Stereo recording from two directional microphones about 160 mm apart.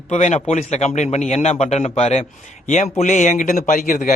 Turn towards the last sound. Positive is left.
turn(degrees=55)  # may be behind; listen again after turning